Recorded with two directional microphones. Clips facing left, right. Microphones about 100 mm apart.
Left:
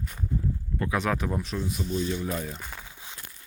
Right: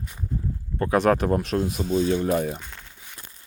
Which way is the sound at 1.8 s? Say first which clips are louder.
Right 6 dB; 45° right (ahead or behind).